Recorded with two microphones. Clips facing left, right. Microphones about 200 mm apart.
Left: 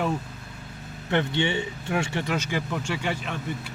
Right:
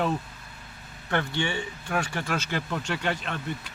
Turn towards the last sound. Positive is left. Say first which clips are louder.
# even
turn(degrees=10)  # may be behind; listen again after turning